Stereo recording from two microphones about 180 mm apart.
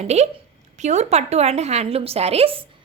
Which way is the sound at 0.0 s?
40° right (ahead or behind).